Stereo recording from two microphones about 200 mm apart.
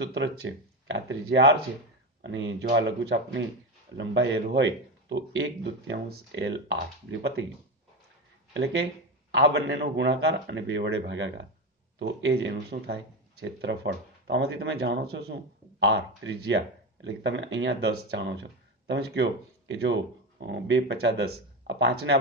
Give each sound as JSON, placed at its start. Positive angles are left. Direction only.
{"t": 0.0, "sound": "a man's voice", "side_deg": -60}
{"t": 9.3, "sound": "a man's voice", "side_deg": -65}
{"t": 15.8, "sound": "a man's voice", "side_deg": -70}